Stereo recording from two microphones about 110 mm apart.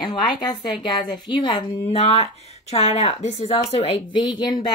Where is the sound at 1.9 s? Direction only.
80° left; by 4.8 s 40° left (ahead or behind).